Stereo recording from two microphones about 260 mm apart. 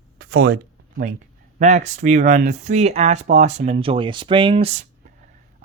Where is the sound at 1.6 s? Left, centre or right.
Right.